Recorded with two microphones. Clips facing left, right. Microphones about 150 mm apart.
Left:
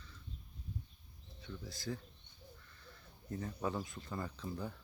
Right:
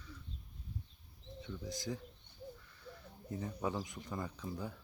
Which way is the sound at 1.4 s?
20° right (ahead or behind).